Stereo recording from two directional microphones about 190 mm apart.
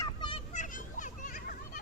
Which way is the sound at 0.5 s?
40° left (ahead or behind).